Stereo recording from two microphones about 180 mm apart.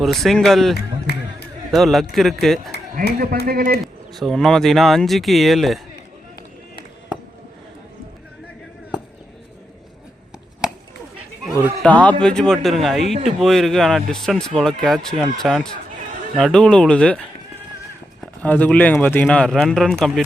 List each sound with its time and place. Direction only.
0.0 s speech: centre (ahead or behind)
1.1 s speech: 65° left (ahead or behind)
1.7 s speech: centre (ahead or behind)
3.2 s a man's voice: 55° right (ahead or behind)
4.1 s speech: centre (ahead or behind)
11.8 s speech: 10° left (ahead or behind)
18.4 s speech: 10° left (ahead or behind)